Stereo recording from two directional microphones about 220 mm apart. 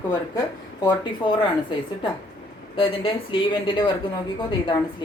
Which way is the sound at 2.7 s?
25° left (ahead or behind).